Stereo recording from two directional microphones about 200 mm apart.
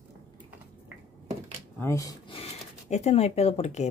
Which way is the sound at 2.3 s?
30° left (ahead or behind).